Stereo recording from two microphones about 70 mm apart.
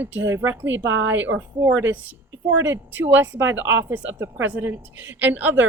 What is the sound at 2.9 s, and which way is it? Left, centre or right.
A woman's voice, right.